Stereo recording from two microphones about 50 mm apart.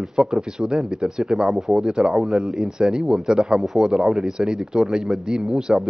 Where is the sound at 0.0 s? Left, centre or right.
Centre.